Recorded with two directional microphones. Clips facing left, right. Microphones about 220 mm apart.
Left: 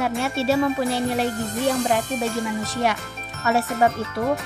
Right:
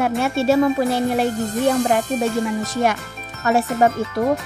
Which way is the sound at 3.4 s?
50° right (ahead or behind).